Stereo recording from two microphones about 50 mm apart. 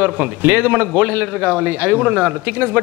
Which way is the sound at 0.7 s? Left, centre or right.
Right.